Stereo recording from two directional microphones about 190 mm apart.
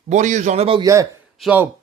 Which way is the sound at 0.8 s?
20° right (ahead or behind).